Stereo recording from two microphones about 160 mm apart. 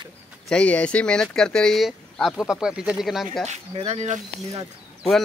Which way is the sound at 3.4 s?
45° right (ahead or behind).